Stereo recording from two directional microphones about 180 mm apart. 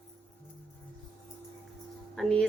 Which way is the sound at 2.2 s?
5° left (ahead or behind).